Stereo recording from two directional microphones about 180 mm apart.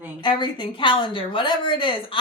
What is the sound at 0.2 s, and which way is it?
A woman's voice, 25° left (ahead or behind).